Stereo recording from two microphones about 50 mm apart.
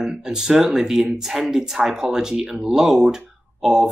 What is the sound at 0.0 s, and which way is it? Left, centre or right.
Speech, centre.